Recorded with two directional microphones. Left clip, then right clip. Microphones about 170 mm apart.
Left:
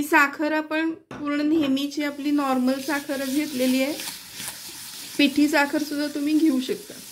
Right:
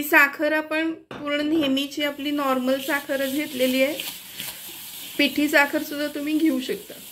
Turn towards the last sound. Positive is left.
turn(degrees=50)  # may be behind; listen again after turning